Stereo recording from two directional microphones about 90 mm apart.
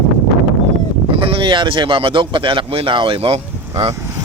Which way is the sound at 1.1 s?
85° right.